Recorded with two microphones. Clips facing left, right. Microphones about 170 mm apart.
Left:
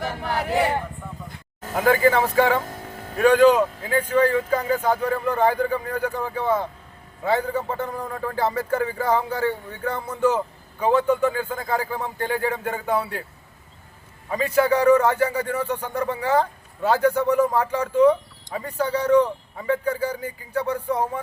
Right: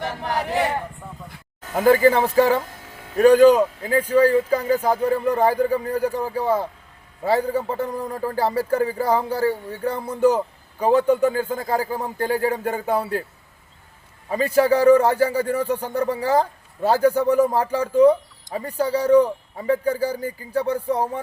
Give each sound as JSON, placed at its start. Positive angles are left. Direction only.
{"t": 0.3, "sound": "speech", "side_deg": 0}
{"t": 1.8, "sound": "a man's voice", "side_deg": -35}
{"t": 14.3, "sound": "a man's voice", "side_deg": -35}